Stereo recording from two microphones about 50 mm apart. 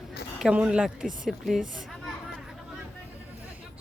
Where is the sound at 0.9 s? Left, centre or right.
Centre.